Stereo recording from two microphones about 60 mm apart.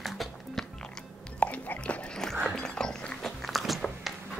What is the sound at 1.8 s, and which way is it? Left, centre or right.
Dog, left.